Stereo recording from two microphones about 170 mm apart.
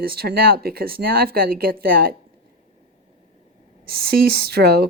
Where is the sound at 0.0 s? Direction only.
65° right (ahead or behind).